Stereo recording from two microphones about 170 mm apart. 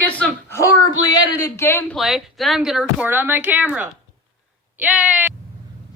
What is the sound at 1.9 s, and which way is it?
Speech, centre (ahead or behind).